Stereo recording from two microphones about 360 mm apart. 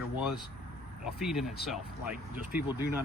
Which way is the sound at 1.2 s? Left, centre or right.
Centre.